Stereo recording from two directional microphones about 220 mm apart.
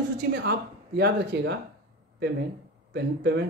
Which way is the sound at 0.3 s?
50° right (ahead or behind).